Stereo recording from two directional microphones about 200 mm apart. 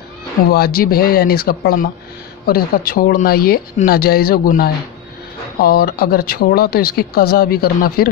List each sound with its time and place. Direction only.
0.5 s speech: 50° left (ahead or behind)